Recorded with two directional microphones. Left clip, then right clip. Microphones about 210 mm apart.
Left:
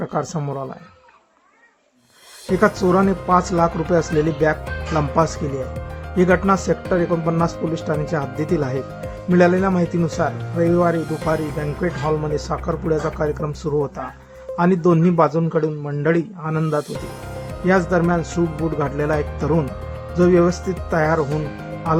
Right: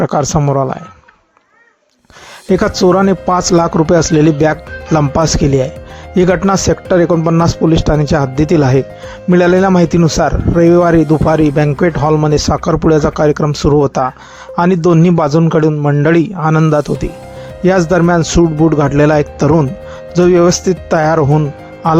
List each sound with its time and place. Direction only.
0.0 s speech: 40° right (ahead or behind)
2.6 s speech: 40° right (ahead or behind)